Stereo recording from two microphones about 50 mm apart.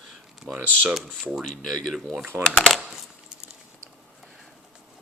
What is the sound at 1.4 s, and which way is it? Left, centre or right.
Speech, centre.